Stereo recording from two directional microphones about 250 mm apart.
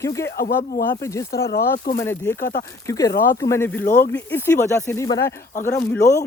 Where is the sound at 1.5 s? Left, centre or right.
Left.